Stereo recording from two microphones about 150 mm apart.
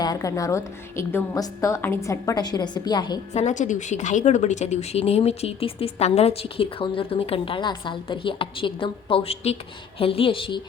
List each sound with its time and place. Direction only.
0.0 s a woman's voice: 25° left (ahead or behind)
3.3 s speech: 55° left (ahead or behind); by 10.6 s 35° left (ahead or behind)